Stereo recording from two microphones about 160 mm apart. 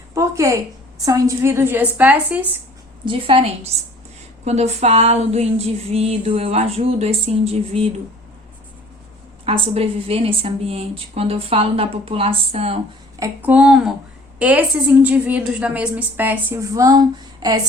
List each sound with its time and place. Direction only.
0.1 s a woman's voice: 20° right (ahead or behind)
3.0 s a woman's voice: 35° right (ahead or behind)
9.4 s a woman's voice: 35° right (ahead or behind)
13.1 s speech: 20° right (ahead or behind)
13.5 s a woman's voice: 5° right (ahead or behind); by 17.6 s 25° right (ahead or behind)